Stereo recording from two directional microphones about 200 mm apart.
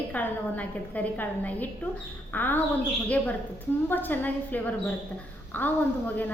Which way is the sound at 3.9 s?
10° left (ahead or behind).